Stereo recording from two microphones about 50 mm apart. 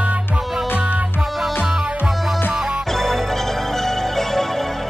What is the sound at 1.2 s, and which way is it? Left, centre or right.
Music, centre.